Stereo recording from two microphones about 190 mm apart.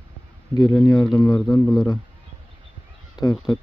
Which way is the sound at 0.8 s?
20° left (ahead or behind).